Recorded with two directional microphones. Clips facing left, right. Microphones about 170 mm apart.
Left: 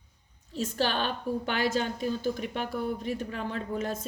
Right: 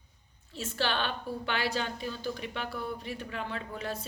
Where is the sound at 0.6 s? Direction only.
40° left (ahead or behind).